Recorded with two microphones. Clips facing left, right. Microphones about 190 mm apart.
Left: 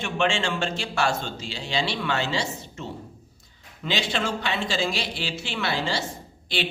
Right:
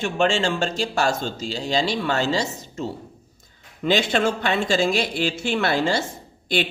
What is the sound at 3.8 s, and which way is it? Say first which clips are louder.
Speech: right 7 dB; 50° right (ahead or behind).